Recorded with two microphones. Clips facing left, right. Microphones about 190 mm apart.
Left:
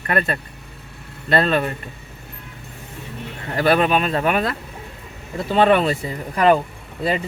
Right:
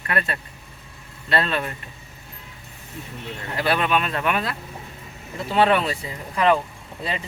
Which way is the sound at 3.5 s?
50° left (ahead or behind).